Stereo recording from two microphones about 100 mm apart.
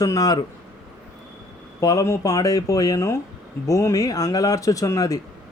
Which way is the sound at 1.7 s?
30° left (ahead or behind).